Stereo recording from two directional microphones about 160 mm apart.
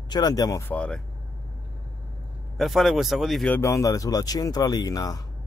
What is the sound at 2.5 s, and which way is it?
Speech, centre (ahead or behind).